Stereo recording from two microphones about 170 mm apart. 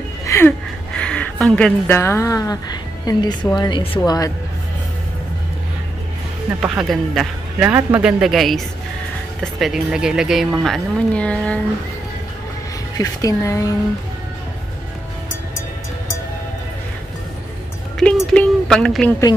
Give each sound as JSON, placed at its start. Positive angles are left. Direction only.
{"t": 0.3, "sound": "a woman's voice", "side_deg": 10}
{"t": 6.6, "sound": "speech", "side_deg": -5}
{"t": 12.9, "sound": "a woman's voice", "side_deg": 20}
{"t": 17.9, "sound": "a sound", "side_deg": 5}